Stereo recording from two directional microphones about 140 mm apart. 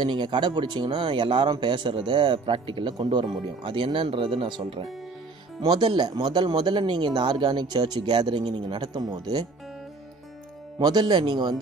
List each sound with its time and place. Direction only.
0.0 s speech: 35° right (ahead or behind)
10.8 s speech: 30° right (ahead or behind)